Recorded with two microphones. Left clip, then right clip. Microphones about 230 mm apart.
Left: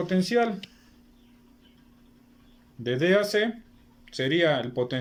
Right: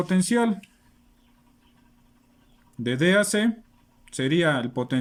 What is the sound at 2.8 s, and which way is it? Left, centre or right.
Speech, right.